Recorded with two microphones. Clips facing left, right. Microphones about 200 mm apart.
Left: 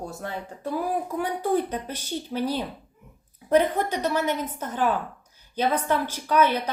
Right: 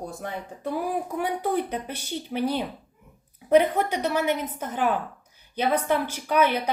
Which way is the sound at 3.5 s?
15° right (ahead or behind).